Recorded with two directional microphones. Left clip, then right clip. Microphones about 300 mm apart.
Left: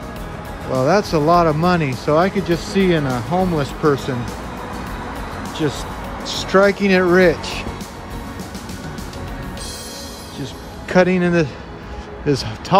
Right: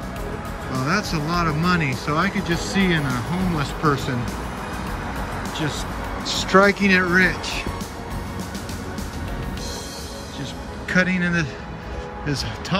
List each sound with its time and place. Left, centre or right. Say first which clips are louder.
0.8 s speech: left 9 dB; centre
5.6 s speech: left 4 dB; centre
10.9 s speech: left 6 dB; centre